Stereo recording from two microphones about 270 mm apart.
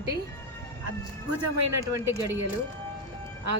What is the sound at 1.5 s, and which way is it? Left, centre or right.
Speech, right.